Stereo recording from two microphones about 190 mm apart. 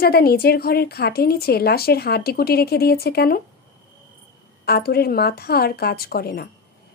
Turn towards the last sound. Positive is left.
turn(degrees=55)  # may be behind; listen again after turning